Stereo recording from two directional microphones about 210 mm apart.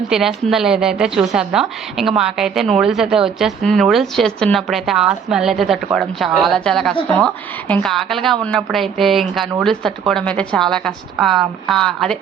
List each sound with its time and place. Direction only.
0.1 s a woman's voice: centre (ahead or behind)